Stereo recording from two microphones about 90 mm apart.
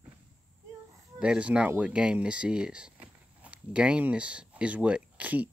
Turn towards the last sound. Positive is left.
turn(degrees=-15)  # may be behind; listen again after turning